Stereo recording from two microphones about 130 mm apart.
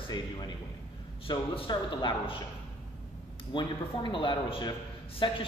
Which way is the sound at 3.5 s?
35° left (ahead or behind).